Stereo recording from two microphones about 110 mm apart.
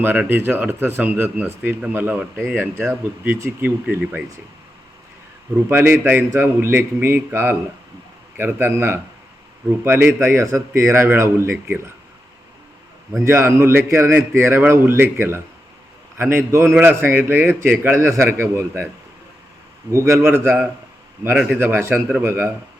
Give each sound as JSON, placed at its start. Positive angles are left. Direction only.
{"t": 0.0, "sound": "speech", "side_deg": -15}
{"t": 5.6, "sound": "a man's voice", "side_deg": -20}
{"t": 13.2, "sound": "a man's voice", "side_deg": -20}
{"t": 19.9, "sound": "a man's voice", "side_deg": -25}
{"t": 21.6, "sound": "a man's voice", "side_deg": -20}